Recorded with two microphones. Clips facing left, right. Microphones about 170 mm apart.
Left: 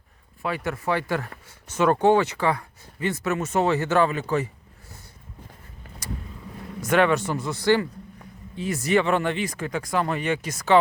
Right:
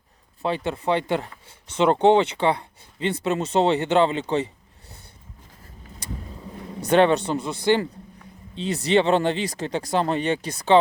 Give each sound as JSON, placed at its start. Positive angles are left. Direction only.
{"t": 0.4, "sound": "speech", "side_deg": -25}
{"t": 6.8, "sound": "speech", "side_deg": -35}